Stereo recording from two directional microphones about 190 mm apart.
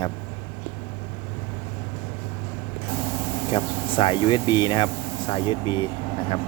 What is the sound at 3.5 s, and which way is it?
Speech, 25° left (ahead or behind).